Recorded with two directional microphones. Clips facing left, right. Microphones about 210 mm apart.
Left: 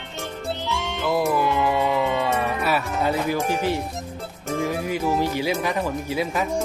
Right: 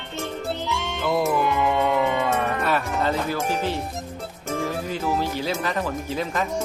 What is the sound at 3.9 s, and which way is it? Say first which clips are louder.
Music: even; centre (ahead or behind).